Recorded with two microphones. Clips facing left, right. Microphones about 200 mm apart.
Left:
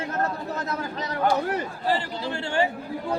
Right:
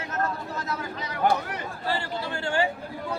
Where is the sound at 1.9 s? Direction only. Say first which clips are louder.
Left 3 dB; 20° left (ahead or behind).